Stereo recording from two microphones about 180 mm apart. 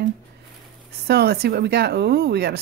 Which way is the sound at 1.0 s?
65° right (ahead or behind).